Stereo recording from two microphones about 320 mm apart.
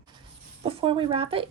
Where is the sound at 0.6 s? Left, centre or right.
Centre.